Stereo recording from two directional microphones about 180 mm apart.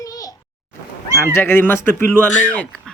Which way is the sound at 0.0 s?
20° left (ahead or behind).